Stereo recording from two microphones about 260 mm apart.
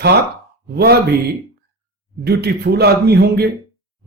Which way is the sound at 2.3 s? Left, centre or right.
Right.